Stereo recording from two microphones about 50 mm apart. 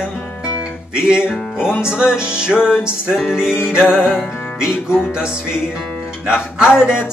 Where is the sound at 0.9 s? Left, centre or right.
Centre.